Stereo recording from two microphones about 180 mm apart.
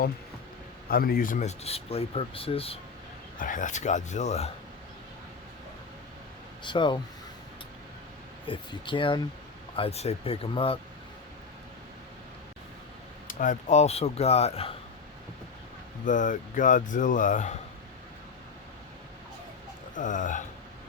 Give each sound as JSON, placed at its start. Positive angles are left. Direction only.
{"t": 0.9, "sound": "speech", "side_deg": 55}
{"t": 3.4, "sound": "speech", "side_deg": 45}
{"t": 6.7, "sound": "speech", "side_deg": 25}
{"t": 8.4, "sound": "speech", "side_deg": 25}
{"t": 13.2, "sound": "speech", "side_deg": 45}
{"t": 16.0, "sound": "speech", "side_deg": 45}
{"t": 20.0, "sound": "speech", "side_deg": 45}